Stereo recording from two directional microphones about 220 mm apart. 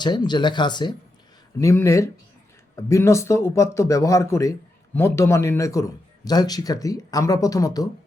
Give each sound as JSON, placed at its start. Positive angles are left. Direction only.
{"t": 0.0, "sound": "a man's voice", "side_deg": 20}